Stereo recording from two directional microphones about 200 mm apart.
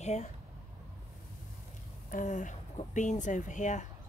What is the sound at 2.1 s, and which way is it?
Speech, 40° left (ahead or behind).